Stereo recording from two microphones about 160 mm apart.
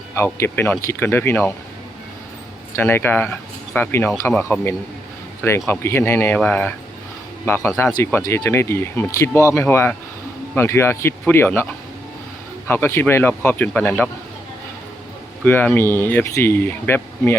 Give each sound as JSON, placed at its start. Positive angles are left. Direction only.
{"t": 0.3, "sound": "speech", "side_deg": 15}
{"t": 2.7, "sound": "a man's voice", "side_deg": 15}
{"t": 15.4, "sound": "speech", "side_deg": 10}